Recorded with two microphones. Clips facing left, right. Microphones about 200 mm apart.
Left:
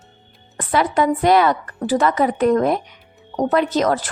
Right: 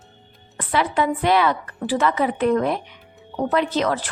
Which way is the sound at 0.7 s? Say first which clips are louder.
Left 3 dB; 45° left (ahead or behind).